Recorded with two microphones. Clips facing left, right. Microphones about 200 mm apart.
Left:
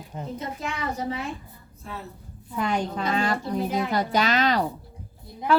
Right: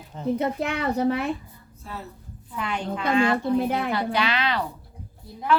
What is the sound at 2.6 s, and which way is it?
A woman's voice, 40° left (ahead or behind).